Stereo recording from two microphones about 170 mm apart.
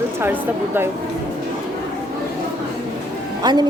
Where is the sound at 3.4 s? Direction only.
25° right (ahead or behind).